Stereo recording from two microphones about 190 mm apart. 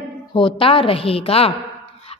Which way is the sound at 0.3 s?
25° left (ahead or behind).